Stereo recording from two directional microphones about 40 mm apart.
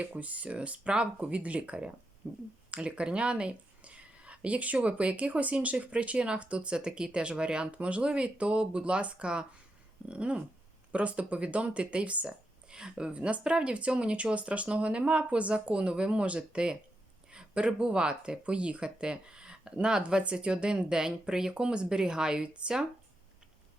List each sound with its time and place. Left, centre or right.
0.2 s speech: right
2.2 s speech: right
12.7 s a woman's voice: right
13.1 s speech: right